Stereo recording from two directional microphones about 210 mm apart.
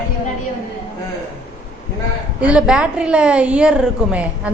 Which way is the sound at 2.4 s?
5° right (ahead or behind).